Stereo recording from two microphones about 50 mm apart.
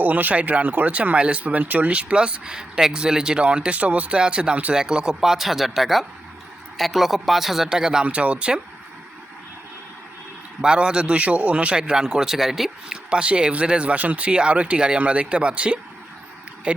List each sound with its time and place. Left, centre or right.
0.0 s speech: right; by 8.0 s centre
8.0 s speech: right
10.6 s a man's voice: centre
13.1 s speech: right